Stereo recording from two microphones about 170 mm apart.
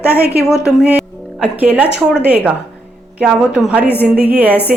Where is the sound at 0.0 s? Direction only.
10° right (ahead or behind).